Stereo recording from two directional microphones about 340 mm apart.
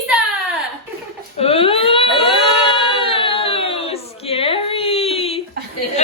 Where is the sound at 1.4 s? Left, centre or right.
Centre.